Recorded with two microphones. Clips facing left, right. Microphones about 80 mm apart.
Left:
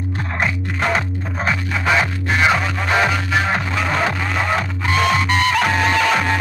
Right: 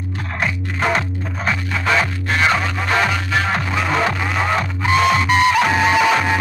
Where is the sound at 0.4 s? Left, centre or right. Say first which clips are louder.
Even; centre.